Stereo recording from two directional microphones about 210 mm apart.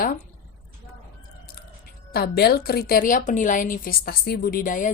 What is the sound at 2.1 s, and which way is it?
A woman's voice, 50° left (ahead or behind).